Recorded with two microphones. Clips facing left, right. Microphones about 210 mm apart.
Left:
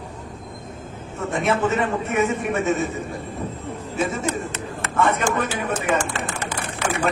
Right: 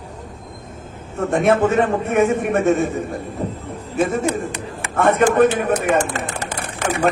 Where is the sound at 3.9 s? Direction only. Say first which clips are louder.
Right 6 dB; 55° right (ahead or behind).